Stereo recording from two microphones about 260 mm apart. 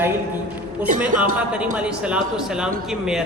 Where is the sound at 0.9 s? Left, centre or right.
Right.